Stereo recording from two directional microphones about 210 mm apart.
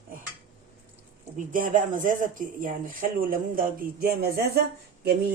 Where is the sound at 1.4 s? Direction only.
40° right (ahead or behind).